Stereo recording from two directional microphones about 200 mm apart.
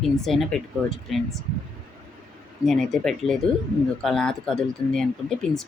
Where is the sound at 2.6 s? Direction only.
Centre (ahead or behind).